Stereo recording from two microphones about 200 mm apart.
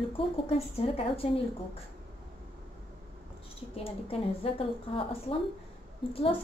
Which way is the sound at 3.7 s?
30° left (ahead or behind).